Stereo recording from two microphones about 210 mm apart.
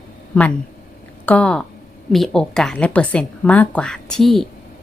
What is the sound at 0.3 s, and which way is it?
Speech, 5° left (ahead or behind).